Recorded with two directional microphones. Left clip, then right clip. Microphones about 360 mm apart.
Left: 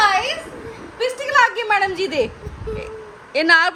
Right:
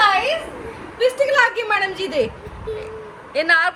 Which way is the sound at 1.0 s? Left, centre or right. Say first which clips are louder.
Right 1 dB; centre.